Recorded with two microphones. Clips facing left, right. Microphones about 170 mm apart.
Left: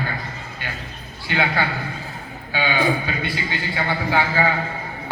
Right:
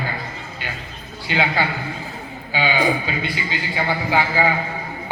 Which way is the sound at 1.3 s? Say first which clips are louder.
Right 1 dB; 20° right (ahead or behind).